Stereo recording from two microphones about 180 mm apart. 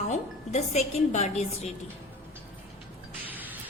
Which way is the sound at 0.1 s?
40° left (ahead or behind).